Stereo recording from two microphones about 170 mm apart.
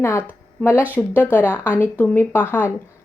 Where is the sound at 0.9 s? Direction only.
10° left (ahead or behind).